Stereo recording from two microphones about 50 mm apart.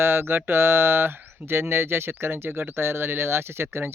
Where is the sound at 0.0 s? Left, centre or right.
Right.